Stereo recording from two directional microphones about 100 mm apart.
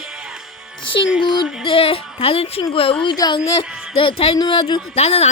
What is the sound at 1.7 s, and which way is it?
Speech, 70° left (ahead or behind).